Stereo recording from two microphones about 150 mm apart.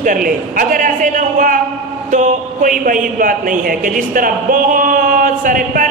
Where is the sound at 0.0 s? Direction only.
65° right (ahead or behind).